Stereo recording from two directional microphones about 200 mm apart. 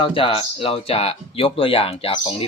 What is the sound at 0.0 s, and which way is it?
Speech, 25° left (ahead or behind).